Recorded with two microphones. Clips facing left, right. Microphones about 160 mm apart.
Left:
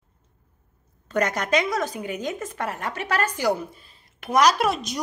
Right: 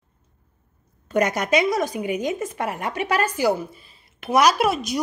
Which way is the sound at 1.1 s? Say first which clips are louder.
Right 3 dB; 10° right (ahead or behind).